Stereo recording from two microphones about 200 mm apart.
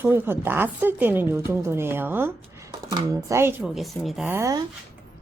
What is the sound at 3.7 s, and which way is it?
Speech, centre (ahead or behind).